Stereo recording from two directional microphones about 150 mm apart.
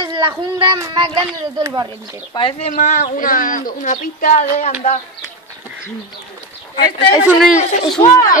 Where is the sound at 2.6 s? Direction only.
60° left (ahead or behind).